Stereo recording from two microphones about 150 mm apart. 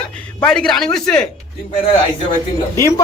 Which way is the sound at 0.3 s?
5° left (ahead or behind).